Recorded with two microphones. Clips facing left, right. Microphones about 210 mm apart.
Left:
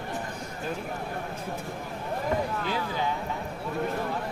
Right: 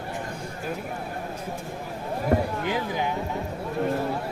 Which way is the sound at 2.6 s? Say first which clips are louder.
Right 3 dB; 15° right (ahead or behind).